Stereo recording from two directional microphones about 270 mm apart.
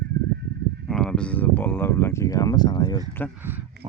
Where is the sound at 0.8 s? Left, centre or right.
Centre.